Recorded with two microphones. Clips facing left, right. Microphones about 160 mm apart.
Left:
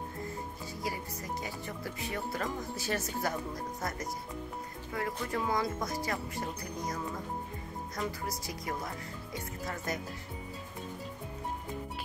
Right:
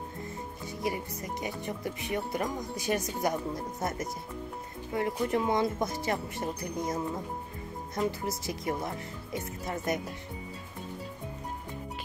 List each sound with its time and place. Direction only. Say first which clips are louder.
0.8 s speech: right 5 dB; 20° right (ahead or behind)